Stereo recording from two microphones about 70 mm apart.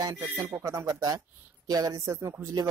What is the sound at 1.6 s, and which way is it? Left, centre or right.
Speech, right.